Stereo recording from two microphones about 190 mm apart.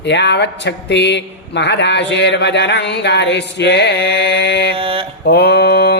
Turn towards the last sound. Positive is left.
turn(degrees=60)  # may be behind; listen again after turning